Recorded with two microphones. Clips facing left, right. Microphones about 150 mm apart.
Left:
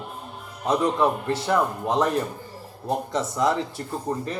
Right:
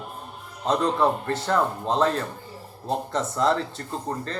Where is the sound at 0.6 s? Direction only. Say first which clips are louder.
Even; 15° left (ahead or behind).